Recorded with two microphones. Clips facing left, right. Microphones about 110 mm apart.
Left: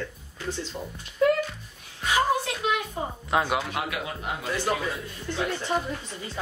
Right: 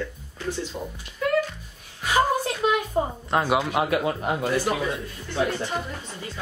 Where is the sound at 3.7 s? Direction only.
40° right (ahead or behind).